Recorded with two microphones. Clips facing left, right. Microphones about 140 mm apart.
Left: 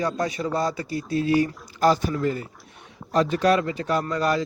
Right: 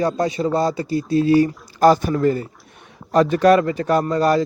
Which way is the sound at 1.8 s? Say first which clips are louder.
Right 6 dB; 50° right (ahead or behind).